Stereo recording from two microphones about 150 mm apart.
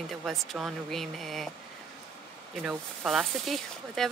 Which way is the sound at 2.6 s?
5° right (ahead or behind).